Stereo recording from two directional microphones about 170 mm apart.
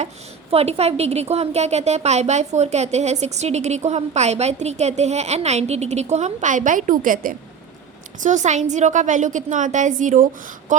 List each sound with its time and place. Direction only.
0.5 s a woman's voice: 40° right (ahead or behind)
10.7 s wail: 45° right (ahead or behind)